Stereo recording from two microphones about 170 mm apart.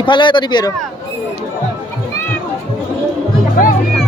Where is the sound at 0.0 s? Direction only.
25° left (ahead or behind).